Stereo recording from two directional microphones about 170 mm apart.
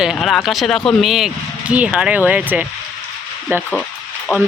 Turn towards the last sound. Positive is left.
turn(degrees=15)  # may be behind; listen again after turning